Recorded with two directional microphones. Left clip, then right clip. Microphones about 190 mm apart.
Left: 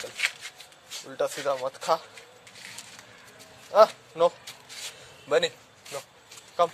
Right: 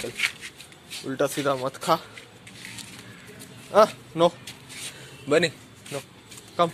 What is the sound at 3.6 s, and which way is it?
A man's voice, centre (ahead or behind).